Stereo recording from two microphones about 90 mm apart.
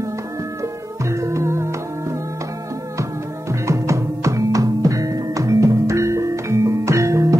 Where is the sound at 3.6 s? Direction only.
35° right (ahead or behind).